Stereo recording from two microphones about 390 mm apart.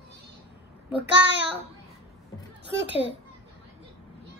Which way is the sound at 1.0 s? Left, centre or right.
Right.